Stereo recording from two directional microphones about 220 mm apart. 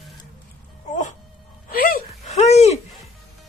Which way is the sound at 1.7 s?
40° left (ahead or behind).